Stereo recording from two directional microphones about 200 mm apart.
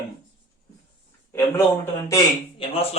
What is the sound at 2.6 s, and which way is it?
Speech, 25° left (ahead or behind).